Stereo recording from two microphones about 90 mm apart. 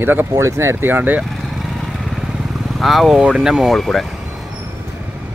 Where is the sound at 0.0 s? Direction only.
20° right (ahead or behind).